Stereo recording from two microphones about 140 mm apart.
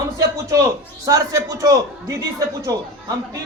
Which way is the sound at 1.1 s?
25° right (ahead or behind).